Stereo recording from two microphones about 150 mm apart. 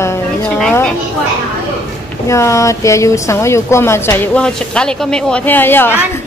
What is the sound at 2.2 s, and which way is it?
A woman's voice, 20° left (ahead or behind).